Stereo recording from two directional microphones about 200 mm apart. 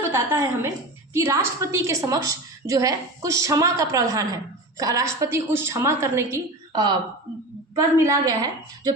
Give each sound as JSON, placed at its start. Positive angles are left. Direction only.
{"t": 0.1, "sound": "a woman's voice", "side_deg": -10}
{"t": 7.9, "sound": "a woman's voice", "side_deg": -15}